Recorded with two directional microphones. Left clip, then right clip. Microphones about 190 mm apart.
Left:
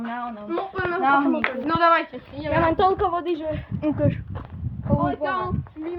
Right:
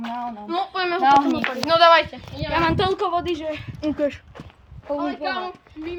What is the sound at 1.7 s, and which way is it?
Speech, 90° right.